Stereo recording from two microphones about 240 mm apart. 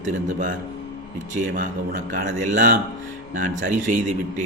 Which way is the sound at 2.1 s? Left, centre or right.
Right.